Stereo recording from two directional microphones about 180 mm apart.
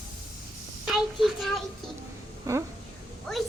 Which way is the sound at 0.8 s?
Centre (ahead or behind).